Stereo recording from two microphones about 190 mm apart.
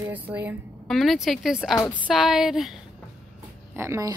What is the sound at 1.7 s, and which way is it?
Speech, 10° left (ahead or behind).